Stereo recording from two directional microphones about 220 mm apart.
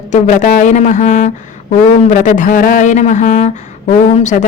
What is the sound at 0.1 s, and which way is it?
Speech, 35° left (ahead or behind).